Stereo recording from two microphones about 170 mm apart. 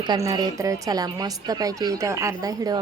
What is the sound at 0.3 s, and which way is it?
A woman's voice, 20° right (ahead or behind).